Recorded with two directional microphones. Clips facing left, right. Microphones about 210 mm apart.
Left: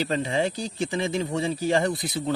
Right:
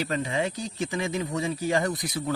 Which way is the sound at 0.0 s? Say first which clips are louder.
Left 3 dB; 30° left (ahead or behind).